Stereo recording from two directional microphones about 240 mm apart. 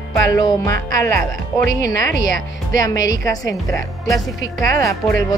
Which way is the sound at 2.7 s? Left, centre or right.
Centre.